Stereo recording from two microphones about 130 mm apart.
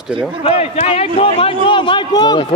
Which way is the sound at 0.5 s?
55° left (ahead or behind).